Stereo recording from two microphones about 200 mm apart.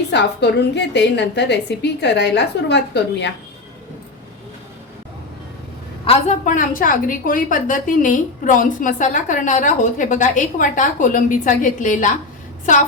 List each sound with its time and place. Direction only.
0.1 s a woman's voice: 60° left (ahead or behind)
6.1 s a woman's voice: 35° left (ahead or behind)